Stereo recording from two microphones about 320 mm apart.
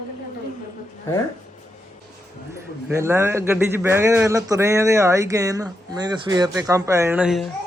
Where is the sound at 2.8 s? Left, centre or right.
Centre.